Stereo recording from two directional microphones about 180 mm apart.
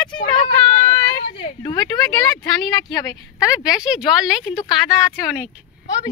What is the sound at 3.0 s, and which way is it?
Speech, 20° left (ahead or behind).